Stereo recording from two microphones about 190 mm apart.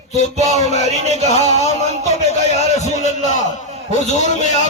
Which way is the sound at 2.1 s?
35° left (ahead or behind).